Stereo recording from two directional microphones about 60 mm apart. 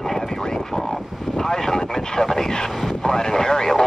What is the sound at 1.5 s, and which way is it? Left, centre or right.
Vehicle, centre.